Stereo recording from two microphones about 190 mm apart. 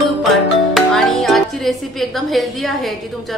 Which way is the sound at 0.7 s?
Centre (ahead or behind).